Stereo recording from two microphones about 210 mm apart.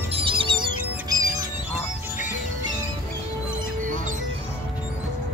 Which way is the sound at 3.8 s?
40° right (ahead or behind).